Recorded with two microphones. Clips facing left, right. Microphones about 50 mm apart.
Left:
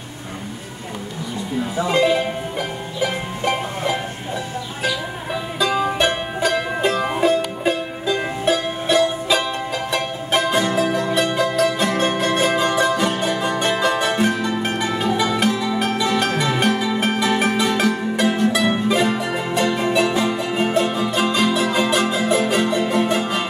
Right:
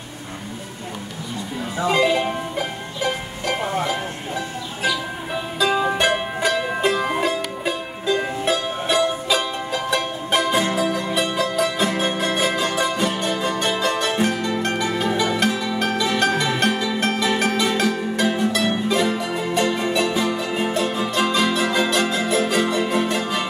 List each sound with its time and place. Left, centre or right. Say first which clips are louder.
1.9 s speech: even; centre
5.7 s music: even; centre
13.2 s music: left 2 dB; centre